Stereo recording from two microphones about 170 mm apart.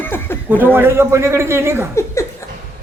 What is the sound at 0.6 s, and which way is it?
Speech, 15° right (ahead or behind).